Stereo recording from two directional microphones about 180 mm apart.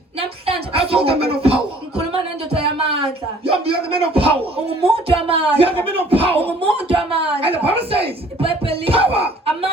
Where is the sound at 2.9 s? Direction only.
30° right (ahead or behind).